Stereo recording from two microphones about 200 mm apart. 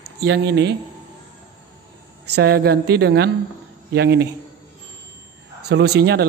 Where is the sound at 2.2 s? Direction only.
55° right (ahead or behind).